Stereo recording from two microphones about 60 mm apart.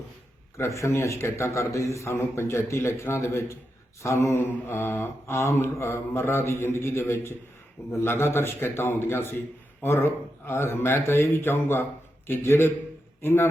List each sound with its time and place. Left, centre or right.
0.5 s a man's voice: left
4.4 s a man's voice: left